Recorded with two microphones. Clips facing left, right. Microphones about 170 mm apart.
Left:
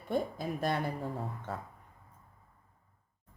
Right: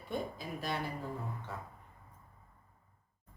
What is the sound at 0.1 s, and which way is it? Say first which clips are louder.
Speech: left 6 dB; 50° left (ahead or behind).